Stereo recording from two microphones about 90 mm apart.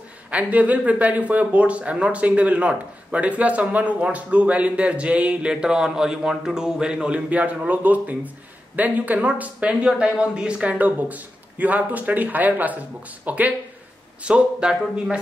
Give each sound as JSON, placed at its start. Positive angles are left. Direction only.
{"t": 0.3, "sound": "speech", "side_deg": -15}